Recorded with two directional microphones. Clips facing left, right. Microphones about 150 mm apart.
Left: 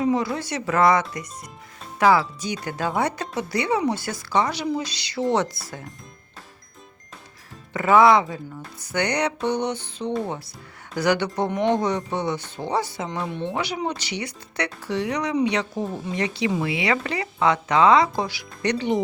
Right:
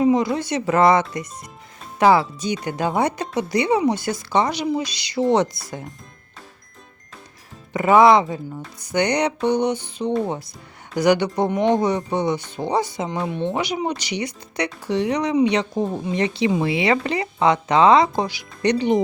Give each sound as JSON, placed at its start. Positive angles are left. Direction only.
{"t": 0.0, "sound": "speech", "side_deg": -20}
{"t": 7.7, "sound": "speech", "side_deg": -20}